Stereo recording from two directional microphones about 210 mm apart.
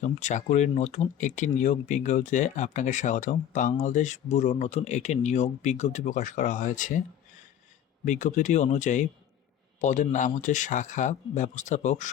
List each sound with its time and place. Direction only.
0.0 s speech: 35° left (ahead or behind)
8.0 s speech: 35° left (ahead or behind)